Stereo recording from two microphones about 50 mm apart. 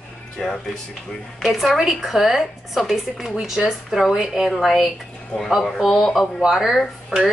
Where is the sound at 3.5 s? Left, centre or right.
Centre.